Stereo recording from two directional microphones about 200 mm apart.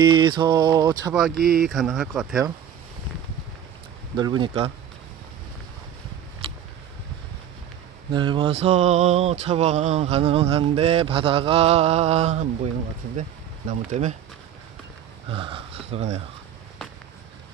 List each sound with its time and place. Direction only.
0.0 s mantra: 20° right (ahead or behind)
1.3 s speech: 50° right (ahead or behind)
1.6 s speech: centre (ahead or behind)
4.2 s mantra: 25° right (ahead or behind)
8.1 s a sound: 25° right (ahead or behind)
15.2 s speech: 25° right (ahead or behind)